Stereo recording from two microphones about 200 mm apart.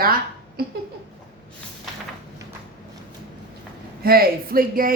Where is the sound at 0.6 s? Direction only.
50° right (ahead or behind).